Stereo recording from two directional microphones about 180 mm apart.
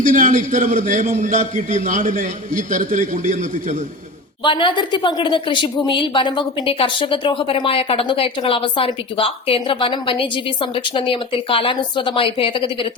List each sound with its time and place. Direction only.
0.0 s a man's voice: 45° right (ahead or behind)
4.4 s a woman's voice: 25° left (ahead or behind)